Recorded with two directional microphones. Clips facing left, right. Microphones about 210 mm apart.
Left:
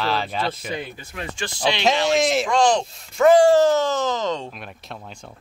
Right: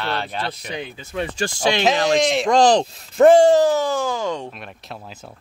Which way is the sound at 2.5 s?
35° right (ahead or behind).